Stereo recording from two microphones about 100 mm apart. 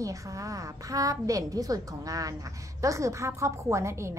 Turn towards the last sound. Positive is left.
turn(degrees=-30)  # may be behind; listen again after turning